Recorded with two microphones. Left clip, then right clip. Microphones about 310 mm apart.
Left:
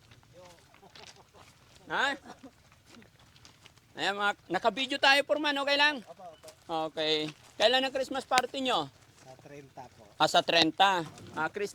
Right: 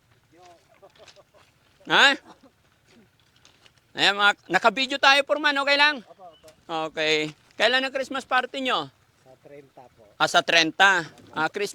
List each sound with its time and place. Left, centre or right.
4.0 s speech: right
4.8 s speech: right
8.5 s speech: right
9.5 s speech: left
10.2 s speech: right
11.3 s speech: right